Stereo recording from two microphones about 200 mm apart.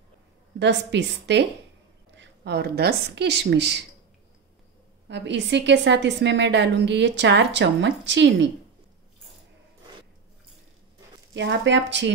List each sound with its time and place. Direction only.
0.6 s a woman's voice: 60° right (ahead or behind)
5.0 s a woman's voice: 60° right (ahead or behind)
11.3 s a woman's voice: 60° right (ahead or behind)